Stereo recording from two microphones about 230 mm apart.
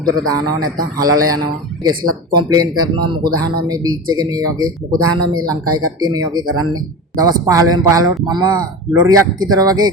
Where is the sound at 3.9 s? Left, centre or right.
Right.